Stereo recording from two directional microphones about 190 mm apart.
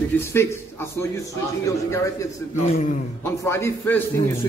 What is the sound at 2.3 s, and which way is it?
Speech, 45° left (ahead or behind).